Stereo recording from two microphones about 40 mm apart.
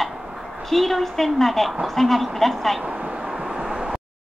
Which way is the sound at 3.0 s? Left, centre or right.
Centre.